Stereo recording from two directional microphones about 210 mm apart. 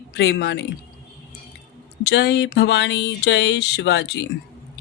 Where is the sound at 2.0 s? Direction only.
55° left (ahead or behind).